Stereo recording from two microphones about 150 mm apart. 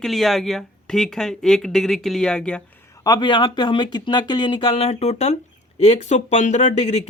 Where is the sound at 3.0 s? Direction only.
30° left (ahead or behind).